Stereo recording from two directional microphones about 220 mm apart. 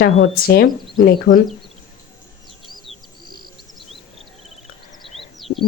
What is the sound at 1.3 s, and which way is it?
Speech, 55° left (ahead or behind).